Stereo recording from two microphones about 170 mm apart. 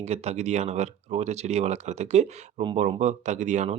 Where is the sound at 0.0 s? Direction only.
40° right (ahead or behind).